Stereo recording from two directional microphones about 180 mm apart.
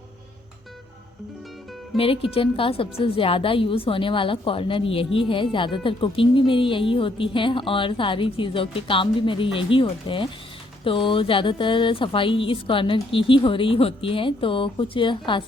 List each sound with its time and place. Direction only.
2.0 s speech: 30° left (ahead or behind)